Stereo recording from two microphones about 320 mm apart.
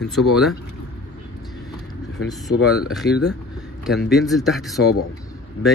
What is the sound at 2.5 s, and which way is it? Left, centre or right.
Speech, left.